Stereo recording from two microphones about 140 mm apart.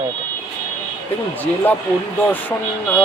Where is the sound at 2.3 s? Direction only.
15° left (ahead or behind).